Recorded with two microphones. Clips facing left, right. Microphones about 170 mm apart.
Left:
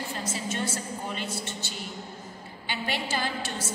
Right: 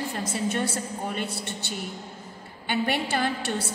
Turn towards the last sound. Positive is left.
turn(degrees=-60)  # may be behind; listen again after turning